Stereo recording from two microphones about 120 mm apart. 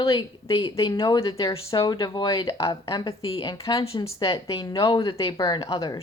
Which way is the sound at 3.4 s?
30° left (ahead or behind).